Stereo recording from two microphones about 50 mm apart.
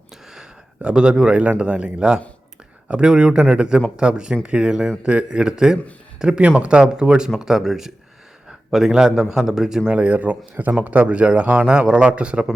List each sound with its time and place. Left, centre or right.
0.8 s a man's voice: centre
9.9 s a man's voice: right